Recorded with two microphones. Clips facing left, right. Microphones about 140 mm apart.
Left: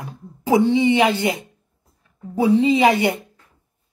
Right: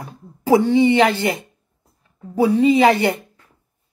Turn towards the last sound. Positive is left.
turn(degrees=20)  # may be behind; listen again after turning